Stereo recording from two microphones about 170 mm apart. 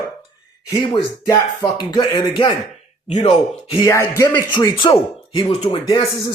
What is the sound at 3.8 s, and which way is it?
Speech, 15° left (ahead or behind).